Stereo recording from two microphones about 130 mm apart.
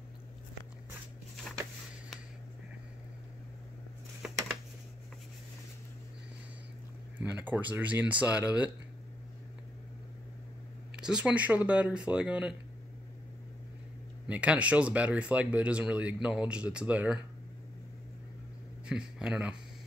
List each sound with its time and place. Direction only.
4.2 s a sound: 5° right (ahead or behind)
7.2 s speech: 10° right (ahead or behind)
11.0 s speech: 5° right (ahead or behind)
14.2 s speech: 10° right (ahead or behind)
18.9 s speech: 5° right (ahead or behind)